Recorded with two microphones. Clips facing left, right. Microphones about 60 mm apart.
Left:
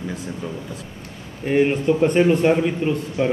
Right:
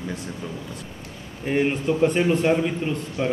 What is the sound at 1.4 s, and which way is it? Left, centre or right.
A man's voice, centre.